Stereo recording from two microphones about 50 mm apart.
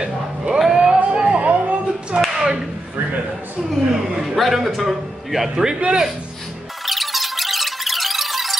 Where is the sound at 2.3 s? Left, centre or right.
Centre.